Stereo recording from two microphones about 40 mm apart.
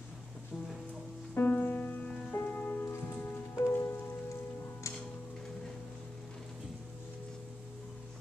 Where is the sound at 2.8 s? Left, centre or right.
Left.